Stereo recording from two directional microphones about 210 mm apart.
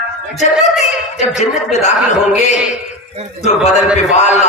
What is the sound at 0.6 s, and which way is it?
Speech, 35° left (ahead or behind).